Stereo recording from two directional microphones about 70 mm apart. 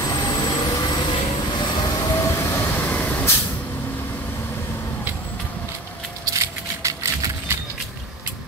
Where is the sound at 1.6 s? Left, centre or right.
Left.